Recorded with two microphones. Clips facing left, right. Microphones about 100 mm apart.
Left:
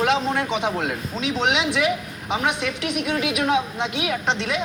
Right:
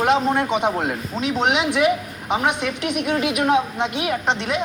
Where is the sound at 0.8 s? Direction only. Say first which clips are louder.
Right 2 dB; 45° right (ahead or behind).